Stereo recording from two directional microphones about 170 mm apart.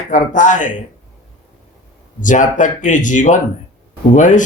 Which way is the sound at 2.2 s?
50° left (ahead or behind).